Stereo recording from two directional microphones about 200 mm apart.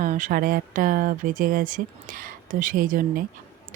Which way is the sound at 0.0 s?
40° right (ahead or behind).